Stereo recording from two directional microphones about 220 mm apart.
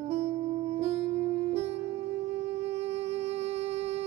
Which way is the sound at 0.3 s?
25° right (ahead or behind).